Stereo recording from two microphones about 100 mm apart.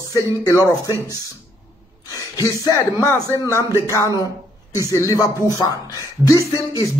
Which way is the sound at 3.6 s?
30° right (ahead or behind).